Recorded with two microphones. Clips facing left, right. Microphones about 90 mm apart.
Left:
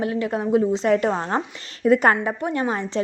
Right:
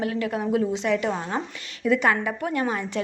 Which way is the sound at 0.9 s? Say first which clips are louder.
Left 5 dB; 40° left (ahead or behind).